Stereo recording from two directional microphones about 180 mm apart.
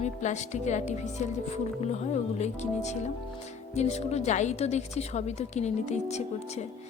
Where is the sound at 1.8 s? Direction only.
40° left (ahead or behind).